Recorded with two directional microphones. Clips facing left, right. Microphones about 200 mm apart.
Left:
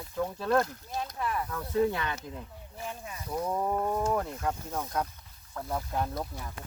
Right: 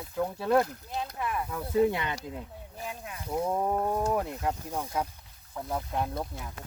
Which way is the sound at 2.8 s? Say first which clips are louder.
Right 1 dB; 5° right (ahead or behind).